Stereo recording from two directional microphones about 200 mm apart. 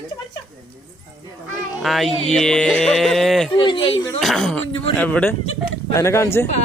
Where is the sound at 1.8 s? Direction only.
Centre (ahead or behind).